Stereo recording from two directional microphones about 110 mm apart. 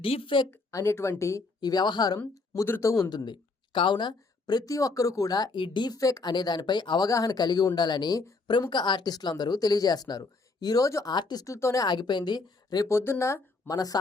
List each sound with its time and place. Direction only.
0.0 s a woman's voice: 55° left (ahead or behind)
0.5 s a woman's voice: 25° left (ahead or behind)
1.6 s speech: 40° left (ahead or behind)
11.9 s speech: 40° left (ahead or behind)
12.9 s speech: 25° left (ahead or behind)